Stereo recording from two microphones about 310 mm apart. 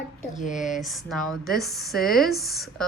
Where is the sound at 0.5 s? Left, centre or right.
Centre.